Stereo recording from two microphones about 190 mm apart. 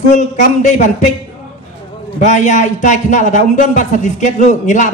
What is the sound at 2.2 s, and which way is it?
Speech, 40° left (ahead or behind).